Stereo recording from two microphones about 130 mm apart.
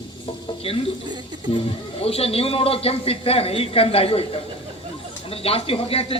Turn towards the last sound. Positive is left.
turn(degrees=45)  # may be behind; listen again after turning